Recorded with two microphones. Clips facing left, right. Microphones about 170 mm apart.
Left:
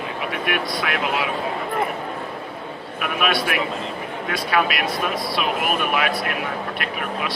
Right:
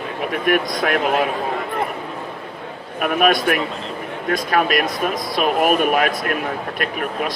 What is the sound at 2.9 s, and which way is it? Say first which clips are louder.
Speech: right 6 dB; 45° right (ahead or behind).